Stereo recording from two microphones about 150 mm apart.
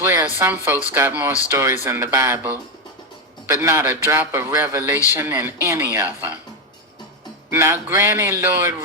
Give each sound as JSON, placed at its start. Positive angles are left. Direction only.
{"t": 0.0, "sound": "a sound", "side_deg": -15}
{"t": 0.3, "sound": "speech", "side_deg": -10}
{"t": 7.5, "sound": "speech", "side_deg": -15}